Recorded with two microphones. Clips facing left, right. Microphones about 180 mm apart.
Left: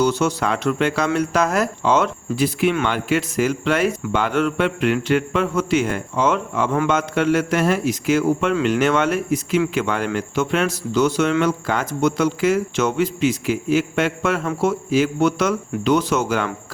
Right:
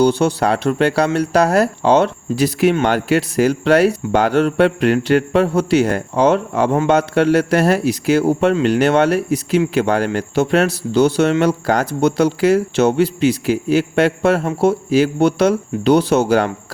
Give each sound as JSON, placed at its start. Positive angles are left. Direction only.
{"t": 0.0, "sound": "speech", "side_deg": -30}